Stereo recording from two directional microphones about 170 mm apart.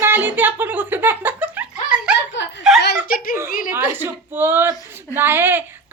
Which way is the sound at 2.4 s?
90° left.